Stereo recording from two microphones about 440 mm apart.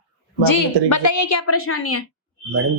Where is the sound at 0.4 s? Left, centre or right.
Left.